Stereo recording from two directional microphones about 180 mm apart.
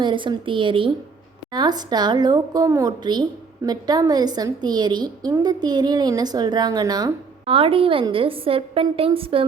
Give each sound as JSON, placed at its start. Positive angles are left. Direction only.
{"t": 0.0, "sound": "a woman's voice", "side_deg": -25}